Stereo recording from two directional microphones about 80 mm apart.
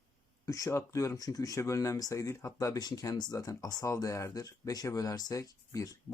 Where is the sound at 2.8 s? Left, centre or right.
Left.